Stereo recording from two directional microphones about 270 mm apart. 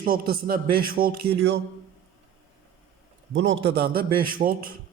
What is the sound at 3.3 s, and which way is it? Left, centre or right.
A man's voice, right.